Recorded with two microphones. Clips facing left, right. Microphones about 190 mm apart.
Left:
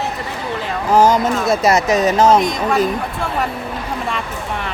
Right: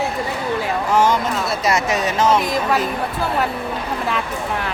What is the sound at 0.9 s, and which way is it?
Speech, 40° left (ahead or behind).